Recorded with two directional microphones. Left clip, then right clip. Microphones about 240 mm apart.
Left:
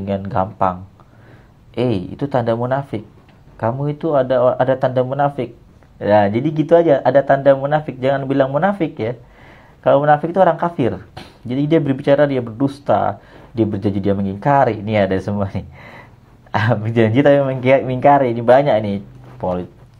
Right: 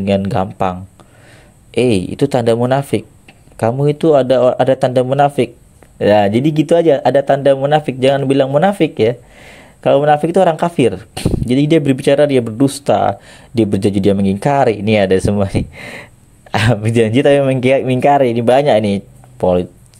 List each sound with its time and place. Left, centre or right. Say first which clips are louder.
0.0 s speech: right 4 dB; right